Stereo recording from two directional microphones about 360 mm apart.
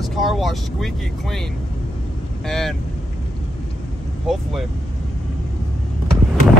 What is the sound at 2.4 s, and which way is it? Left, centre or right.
Speech, centre.